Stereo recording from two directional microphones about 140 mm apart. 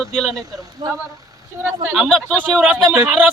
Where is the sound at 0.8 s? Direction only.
30° right (ahead or behind).